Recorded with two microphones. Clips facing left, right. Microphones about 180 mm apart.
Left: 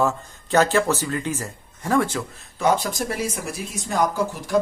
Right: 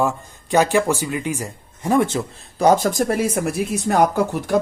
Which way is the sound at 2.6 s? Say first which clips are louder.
Right 6 dB; 40° right (ahead or behind).